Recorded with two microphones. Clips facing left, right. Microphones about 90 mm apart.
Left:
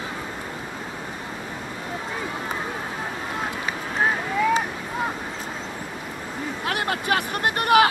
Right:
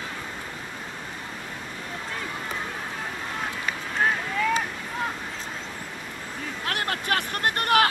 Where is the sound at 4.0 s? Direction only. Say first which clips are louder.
Left 3 dB; 10° left (ahead or behind).